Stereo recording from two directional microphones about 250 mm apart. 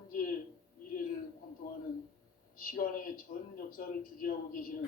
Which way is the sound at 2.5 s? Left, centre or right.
Left.